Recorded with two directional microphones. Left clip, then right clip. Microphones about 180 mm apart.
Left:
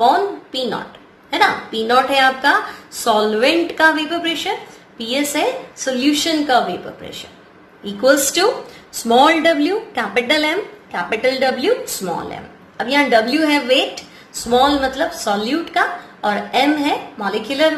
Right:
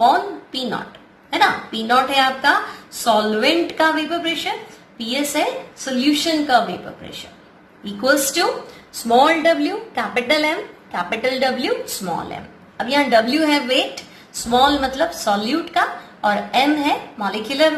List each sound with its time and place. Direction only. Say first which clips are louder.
0.5 s a sound: left 3 dB; 10° left (ahead or behind)
1.3 s a woman's voice: left 1 dB; 10° left (ahead or behind)
7.8 s a woman's voice: left 3 dB; 15° left (ahead or behind)